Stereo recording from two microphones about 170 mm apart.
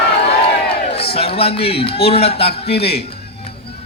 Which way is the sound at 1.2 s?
35° left (ahead or behind).